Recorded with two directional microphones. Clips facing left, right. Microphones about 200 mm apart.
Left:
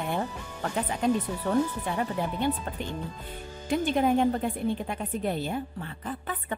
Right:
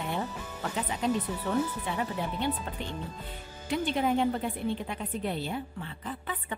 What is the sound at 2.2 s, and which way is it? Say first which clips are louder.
Speech: left 3 dB; 45° left (ahead or behind).